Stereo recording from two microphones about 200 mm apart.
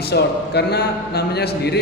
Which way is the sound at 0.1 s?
55° left (ahead or behind).